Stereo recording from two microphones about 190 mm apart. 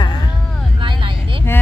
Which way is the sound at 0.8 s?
25° right (ahead or behind).